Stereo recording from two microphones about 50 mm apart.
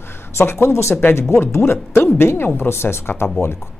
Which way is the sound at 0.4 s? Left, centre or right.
Left.